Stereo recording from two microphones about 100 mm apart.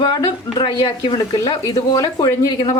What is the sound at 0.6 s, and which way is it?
Speech, 55° left (ahead or behind).